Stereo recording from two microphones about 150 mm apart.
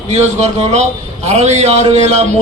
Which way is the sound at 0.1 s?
50° right (ahead or behind).